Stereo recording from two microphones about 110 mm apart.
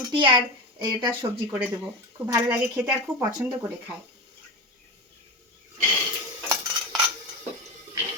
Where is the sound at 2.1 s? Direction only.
30° right (ahead or behind).